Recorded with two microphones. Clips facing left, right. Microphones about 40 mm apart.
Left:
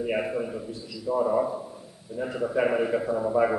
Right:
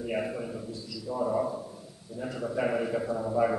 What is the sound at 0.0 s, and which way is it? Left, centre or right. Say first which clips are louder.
A man's voice: left 4 dB; left.